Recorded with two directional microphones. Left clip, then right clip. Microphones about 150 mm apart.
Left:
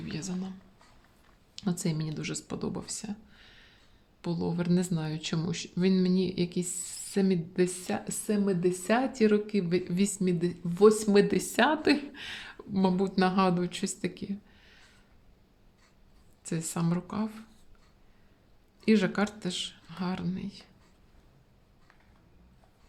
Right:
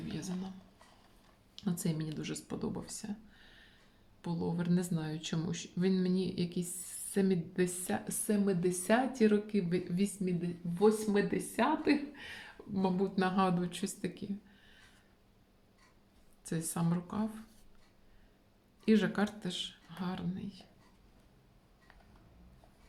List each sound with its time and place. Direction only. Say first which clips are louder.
0.1 s speech: left 6 dB; 30° left (ahead or behind)
1.5 s speech: left 5 dB; 35° left (ahead or behind)
10.4 s speech: left 8 dB; 90° left; by 14.8 s 35° left (ahead or behind)
16.4 s speech: left 4 dB; 30° left (ahead or behind)
18.9 s speech: left 4 dB; 30° left (ahead or behind)